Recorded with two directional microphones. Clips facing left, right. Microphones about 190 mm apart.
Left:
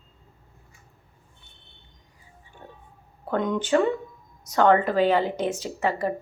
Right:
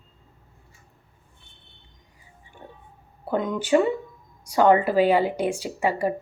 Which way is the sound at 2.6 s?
15° right (ahead or behind).